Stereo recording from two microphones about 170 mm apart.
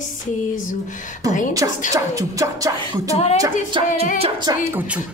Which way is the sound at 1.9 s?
20° right (ahead or behind).